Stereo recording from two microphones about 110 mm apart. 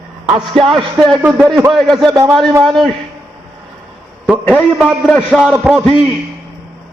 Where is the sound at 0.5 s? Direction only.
50° right (ahead or behind).